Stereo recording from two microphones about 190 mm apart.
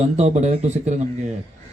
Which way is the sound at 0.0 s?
35° right (ahead or behind).